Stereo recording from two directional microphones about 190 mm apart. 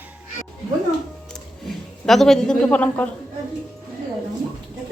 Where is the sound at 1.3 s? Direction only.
Centre (ahead or behind).